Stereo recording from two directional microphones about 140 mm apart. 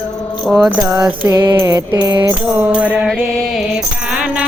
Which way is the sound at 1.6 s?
25° right (ahead or behind).